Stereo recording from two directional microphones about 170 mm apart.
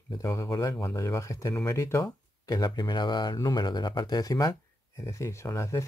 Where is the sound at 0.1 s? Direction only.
20° left (ahead or behind).